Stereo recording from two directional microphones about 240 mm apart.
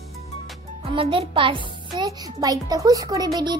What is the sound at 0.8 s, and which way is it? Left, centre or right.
A child's voice, right.